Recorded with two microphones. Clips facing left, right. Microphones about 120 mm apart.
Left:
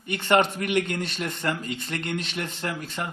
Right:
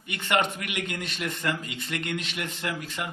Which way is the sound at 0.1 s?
35° left (ahead or behind).